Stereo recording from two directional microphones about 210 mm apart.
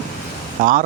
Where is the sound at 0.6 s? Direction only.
40° right (ahead or behind).